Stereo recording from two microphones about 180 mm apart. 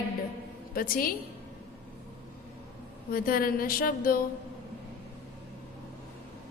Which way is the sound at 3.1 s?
55° left (ahead or behind).